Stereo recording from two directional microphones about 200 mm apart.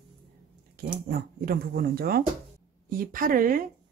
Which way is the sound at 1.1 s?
50° right (ahead or behind).